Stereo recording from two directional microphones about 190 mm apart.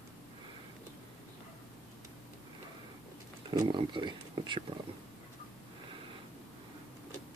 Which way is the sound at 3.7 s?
25° right (ahead or behind).